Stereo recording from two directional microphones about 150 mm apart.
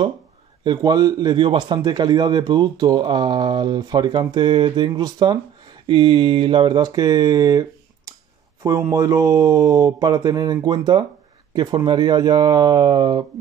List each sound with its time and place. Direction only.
0.7 s a man's voice: 25° right (ahead or behind)